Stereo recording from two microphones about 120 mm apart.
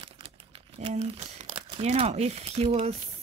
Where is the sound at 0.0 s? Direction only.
55° right (ahead or behind).